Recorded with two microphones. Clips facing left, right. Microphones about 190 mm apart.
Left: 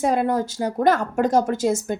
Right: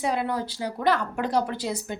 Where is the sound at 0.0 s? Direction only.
45° left (ahead or behind).